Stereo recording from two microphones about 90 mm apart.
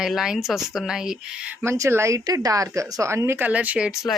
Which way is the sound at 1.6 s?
30° right (ahead or behind).